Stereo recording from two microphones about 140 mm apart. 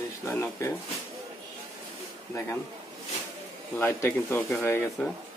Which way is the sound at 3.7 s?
15° left (ahead or behind).